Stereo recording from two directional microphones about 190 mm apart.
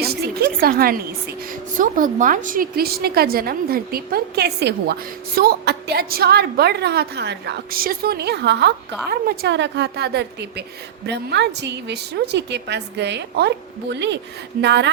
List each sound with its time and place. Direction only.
0.0 s a woman's voice: 55° right (ahead or behind)